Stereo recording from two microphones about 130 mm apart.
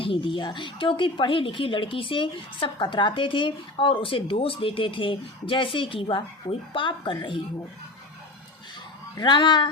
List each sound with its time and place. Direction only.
0.0 s speech: 40° left (ahead or behind)
9.1 s speech: 35° left (ahead or behind)